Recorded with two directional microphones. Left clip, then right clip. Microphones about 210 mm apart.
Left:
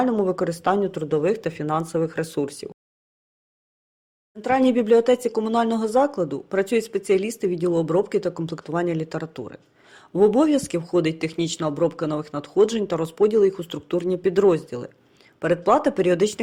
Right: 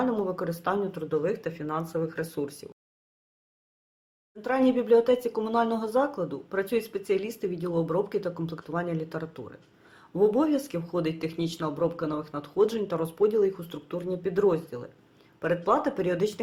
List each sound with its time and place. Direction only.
0.0 s speech: 30° left (ahead or behind)
4.4 s speech: 35° left (ahead or behind)